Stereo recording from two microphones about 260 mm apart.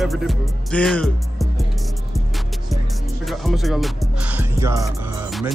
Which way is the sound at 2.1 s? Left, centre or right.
Centre.